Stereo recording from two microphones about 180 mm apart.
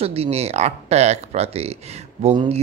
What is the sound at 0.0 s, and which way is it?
Speech, 35° right (ahead or behind).